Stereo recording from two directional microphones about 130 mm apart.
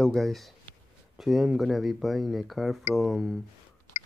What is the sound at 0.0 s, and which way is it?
Speech, centre (ahead or behind).